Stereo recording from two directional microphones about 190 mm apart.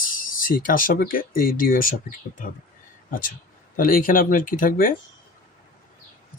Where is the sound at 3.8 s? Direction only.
50° left (ahead or behind).